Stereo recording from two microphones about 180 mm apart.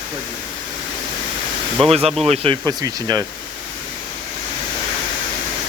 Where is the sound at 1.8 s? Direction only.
30° right (ahead or behind).